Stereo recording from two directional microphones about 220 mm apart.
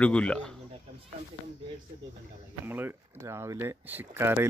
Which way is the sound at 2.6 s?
10° right (ahead or behind).